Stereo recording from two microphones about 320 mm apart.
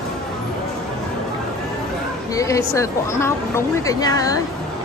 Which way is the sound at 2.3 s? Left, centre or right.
Centre.